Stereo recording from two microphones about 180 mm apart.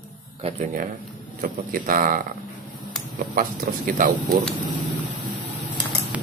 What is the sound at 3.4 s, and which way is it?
Speech, 50° right (ahead or behind).